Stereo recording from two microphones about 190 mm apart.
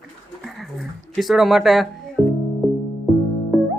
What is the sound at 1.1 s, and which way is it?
Speech, centre (ahead or behind).